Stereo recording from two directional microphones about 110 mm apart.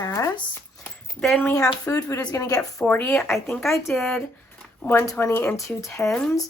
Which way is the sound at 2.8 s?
15° left (ahead or behind).